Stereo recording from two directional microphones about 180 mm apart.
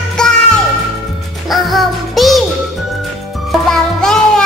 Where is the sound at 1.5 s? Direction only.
Centre (ahead or behind).